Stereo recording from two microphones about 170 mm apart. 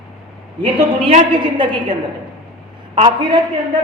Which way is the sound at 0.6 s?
30° right (ahead or behind).